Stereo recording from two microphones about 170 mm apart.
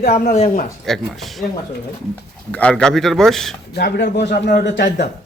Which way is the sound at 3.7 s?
75° left (ahead or behind).